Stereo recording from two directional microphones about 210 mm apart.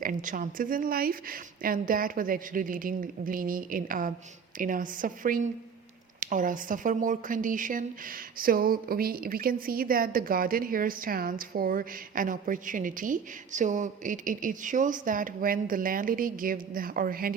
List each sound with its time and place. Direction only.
0.0 s a woman's voice: 40° right (ahead or behind)